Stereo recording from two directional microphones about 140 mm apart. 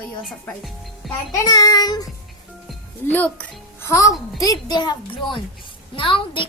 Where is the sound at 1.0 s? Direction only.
Centre (ahead or behind).